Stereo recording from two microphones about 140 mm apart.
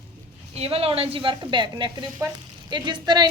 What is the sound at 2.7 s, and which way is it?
Speech, 35° right (ahead or behind).